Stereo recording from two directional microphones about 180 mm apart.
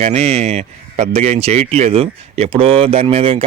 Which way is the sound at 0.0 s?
35° right (ahead or behind).